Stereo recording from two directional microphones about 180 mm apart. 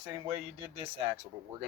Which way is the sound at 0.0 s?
20° right (ahead or behind).